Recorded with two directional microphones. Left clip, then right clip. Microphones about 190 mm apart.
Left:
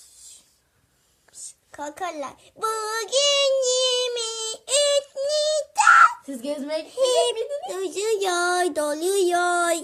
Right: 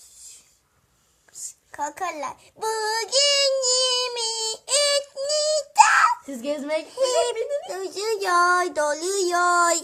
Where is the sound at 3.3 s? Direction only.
30° left (ahead or behind).